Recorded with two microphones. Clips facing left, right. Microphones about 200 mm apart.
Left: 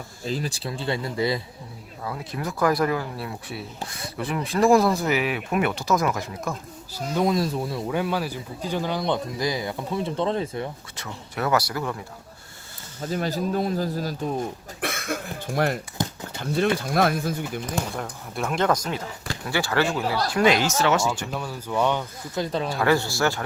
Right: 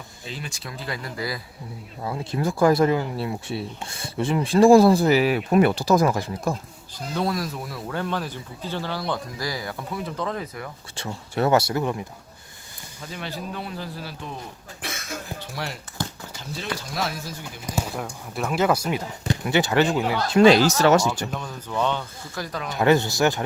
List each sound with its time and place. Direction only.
0.3 s speech: 35° left (ahead or behind)
2.0 s speech: 25° right (ahead or behind)
7.2 s speech: 20° left (ahead or behind)
7.9 s speech: 10° left (ahead or behind); by 10.7 s 25° left (ahead or behind)
10.9 s speech: 30° right (ahead or behind)
13.0 s speech: 40° left (ahead or behind); by 17.4 s 55° left (ahead or behind)
17.7 s speech: 10° right (ahead or behind); by 21.0 s 40° right (ahead or behind)
21.3 s speech: 10° left (ahead or behind)
22.4 s speech: 30° left (ahead or behind)
22.7 s speech: 20° right (ahead or behind)